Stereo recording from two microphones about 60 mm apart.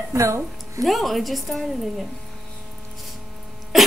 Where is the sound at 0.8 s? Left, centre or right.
Centre.